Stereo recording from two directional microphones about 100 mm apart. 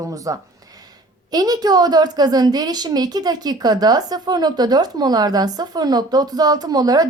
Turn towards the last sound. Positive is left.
turn(degrees=-40)  # may be behind; listen again after turning